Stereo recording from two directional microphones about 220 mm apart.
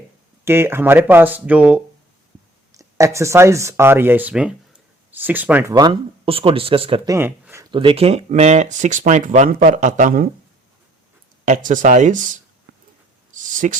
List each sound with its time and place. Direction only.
0.4 s speech: 10° right (ahead or behind)
5.7 s speech: 20° right (ahead or behind); by 10.2 s 35° right (ahead or behind)
11.4 s speech: 35° right (ahead or behind)